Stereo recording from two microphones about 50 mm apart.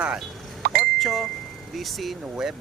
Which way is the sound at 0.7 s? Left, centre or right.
Centre.